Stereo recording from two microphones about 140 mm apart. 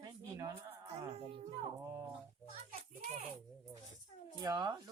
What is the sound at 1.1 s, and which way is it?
Speech, 50° right (ahead or behind).